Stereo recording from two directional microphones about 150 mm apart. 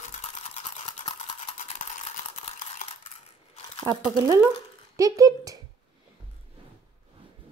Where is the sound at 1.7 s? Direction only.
50° left (ahead or behind).